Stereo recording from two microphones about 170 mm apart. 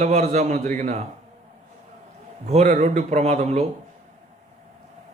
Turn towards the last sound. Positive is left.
turn(degrees=-40)  # may be behind; listen again after turning